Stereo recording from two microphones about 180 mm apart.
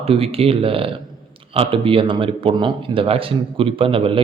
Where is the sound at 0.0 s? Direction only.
35° right (ahead or behind).